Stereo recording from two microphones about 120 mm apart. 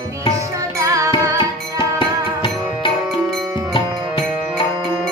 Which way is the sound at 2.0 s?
45° left (ahead or behind).